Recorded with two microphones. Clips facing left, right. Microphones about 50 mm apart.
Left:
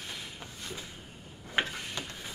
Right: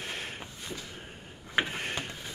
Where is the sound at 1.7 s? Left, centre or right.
Right.